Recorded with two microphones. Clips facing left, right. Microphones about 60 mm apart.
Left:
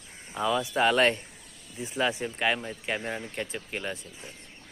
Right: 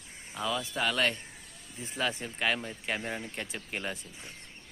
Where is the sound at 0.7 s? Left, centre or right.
Left.